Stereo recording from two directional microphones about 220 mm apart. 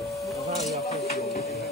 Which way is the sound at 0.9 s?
30° left (ahead or behind).